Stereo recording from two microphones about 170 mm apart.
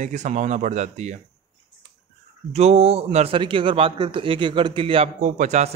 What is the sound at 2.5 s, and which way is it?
Speech, 40° right (ahead or behind).